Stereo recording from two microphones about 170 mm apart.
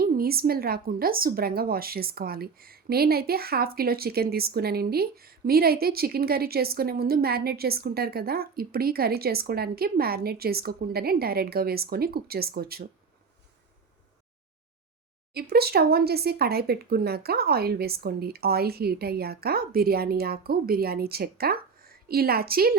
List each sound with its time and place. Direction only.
0.0 s a woman's voice: 60° right (ahead or behind)
15.3 s a woman's voice: 65° right (ahead or behind)